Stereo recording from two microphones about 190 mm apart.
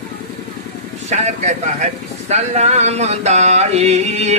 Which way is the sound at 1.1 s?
35° right (ahead or behind).